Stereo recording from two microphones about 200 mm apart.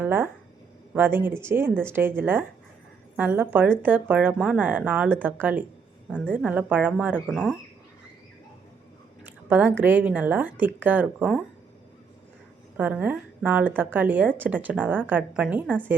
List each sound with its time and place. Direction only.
0.0 s speech: 10° right (ahead or behind)
6.1 s a woman's voice: 5° left (ahead or behind)
6.3 s speech: 5° right (ahead or behind)
9.2 s speech: 10° right (ahead or behind)
12.7 s speech: 10° right (ahead or behind)